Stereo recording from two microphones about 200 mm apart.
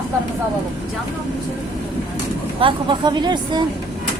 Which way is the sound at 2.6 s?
25° right (ahead or behind).